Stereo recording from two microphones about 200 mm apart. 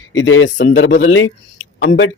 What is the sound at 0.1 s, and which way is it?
Speech, 75° left (ahead or behind).